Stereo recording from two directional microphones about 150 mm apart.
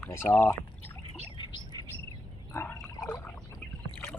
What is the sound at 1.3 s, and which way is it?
Bird, 30° left (ahead or behind).